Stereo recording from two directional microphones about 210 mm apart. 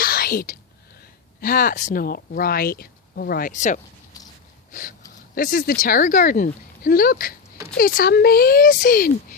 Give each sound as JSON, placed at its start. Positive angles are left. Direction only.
{"t": 0.0, "sound": "whispering", "side_deg": 45}
{"t": 1.4, "sound": "speech", "side_deg": 40}
{"t": 4.7, "sound": "a sound", "side_deg": 40}
{"t": 5.3, "sound": "speech", "side_deg": 40}